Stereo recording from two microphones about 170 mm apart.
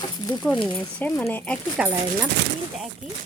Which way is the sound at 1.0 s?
10° left (ahead or behind).